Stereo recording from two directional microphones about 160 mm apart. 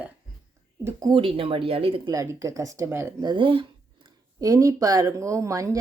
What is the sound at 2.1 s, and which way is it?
Speech, 20° right (ahead or behind).